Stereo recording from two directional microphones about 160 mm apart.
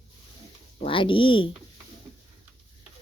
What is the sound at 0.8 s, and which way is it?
Speech, 35° left (ahead or behind).